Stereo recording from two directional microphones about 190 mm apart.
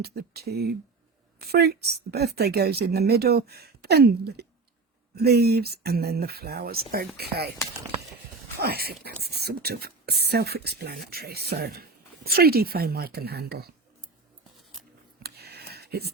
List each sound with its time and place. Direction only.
0.0 s a woman's voice: 60° right (ahead or behind)
8.6 s a woman's voice: 55° right (ahead or behind)
15.2 s a sound: 60° right (ahead or behind)